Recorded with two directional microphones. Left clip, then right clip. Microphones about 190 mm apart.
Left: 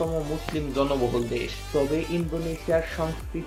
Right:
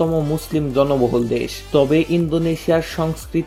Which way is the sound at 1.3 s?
65° right (ahead or behind).